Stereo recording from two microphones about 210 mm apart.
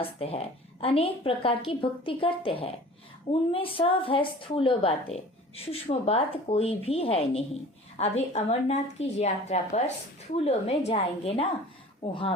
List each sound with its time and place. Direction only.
0.0 s a woman's voice: 25° left (ahead or behind)